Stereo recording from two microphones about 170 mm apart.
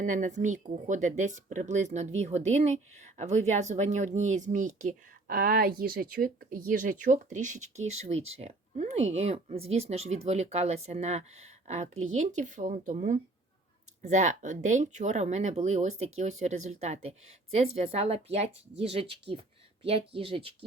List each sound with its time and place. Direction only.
0.0 s speech: 50° right (ahead or behind); by 20.5 s 30° right (ahead or behind)